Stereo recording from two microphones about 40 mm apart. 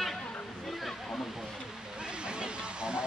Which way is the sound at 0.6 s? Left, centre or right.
Centre.